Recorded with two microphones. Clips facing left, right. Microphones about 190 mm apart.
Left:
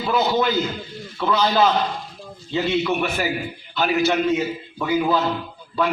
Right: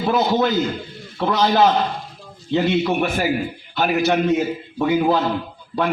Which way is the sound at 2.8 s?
45° right (ahead or behind).